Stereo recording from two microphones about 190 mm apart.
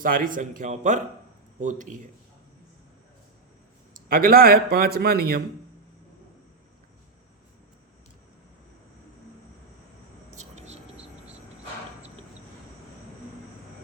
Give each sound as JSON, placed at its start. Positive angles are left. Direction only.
{"t": 0.0, "sound": "a man's voice", "side_deg": -45}
{"t": 3.9, "sound": "speech", "side_deg": -50}
{"t": 10.3, "sound": "vehicle", "side_deg": -35}